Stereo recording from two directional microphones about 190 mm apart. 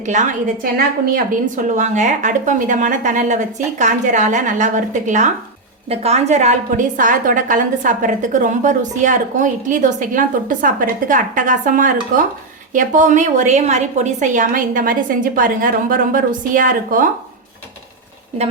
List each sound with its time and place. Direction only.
0.0 s a woman's voice: 40° right (ahead or behind)